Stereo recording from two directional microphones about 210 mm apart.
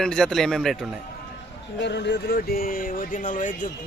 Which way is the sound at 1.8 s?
55° left (ahead or behind).